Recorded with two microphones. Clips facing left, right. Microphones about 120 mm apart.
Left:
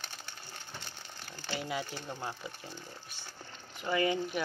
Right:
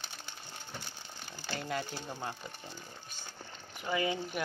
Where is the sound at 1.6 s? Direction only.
5° left (ahead or behind).